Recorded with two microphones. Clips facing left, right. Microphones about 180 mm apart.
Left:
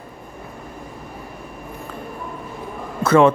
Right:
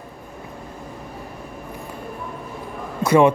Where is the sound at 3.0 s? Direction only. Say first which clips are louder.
Left 1 dB; 15° right (ahead or behind).